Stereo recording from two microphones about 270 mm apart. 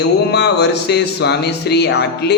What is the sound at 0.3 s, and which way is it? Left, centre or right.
Speech, left.